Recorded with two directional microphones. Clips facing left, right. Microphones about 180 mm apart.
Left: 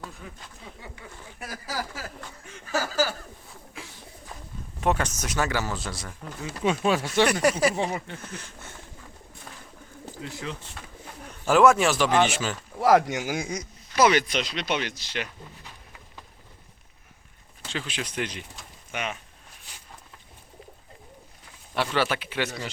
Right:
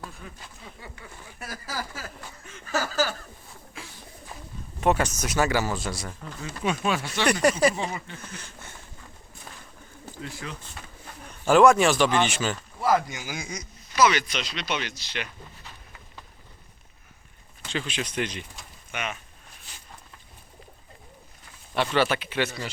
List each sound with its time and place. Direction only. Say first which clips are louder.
0.8 s a sound: even; 15° left (ahead or behind)
3.8 s bird: even; 15° left (ahead or behind)
4.8 s speech: right 2 dB; 5° right (ahead or behind)
6.6 s speech: left 3 dB; 30° left (ahead or behind); by 7.3 s 45° left (ahead or behind)
7.8 s a sound: left 4 dB; 65° left (ahead or behind)
8.3 s speech: left 2 dB; centre (ahead or behind)
10.1 s speech: left 2 dB; 20° left (ahead or behind)
11.0 s bird: right 2 dB; 5° left (ahead or behind)
12.2 s speech: left 1 dB; 5° left (ahead or behind)
12.8 s speech: left 4 dB; 80° left; by 15.3 s 45° left (ahead or behind)
17.7 s speech: right 2 dB; 5° left (ahead or behind)
18.9 s speech: left 1 dB; 35° left (ahead or behind)
19.7 s a sound: even; 10° left (ahead or behind)
21.8 s speech: right 2 dB; 5° left (ahead or behind)